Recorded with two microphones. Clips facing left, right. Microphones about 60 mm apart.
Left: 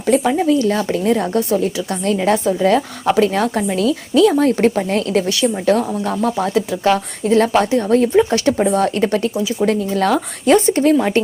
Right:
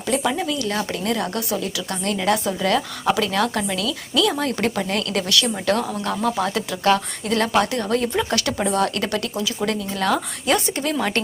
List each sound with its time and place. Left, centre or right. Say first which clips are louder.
0.1 s a woman's voice: left 8 dB; left
5.1 s speech: left 4 dB; left
6.4 s speech: left 5 dB; centre
9.9 s a woman's voice: left 5 dB; left